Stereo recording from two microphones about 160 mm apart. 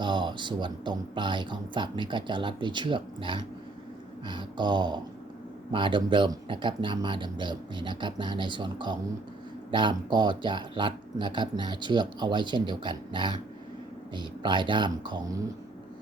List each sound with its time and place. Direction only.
0.0 s speech: 30° right (ahead or behind)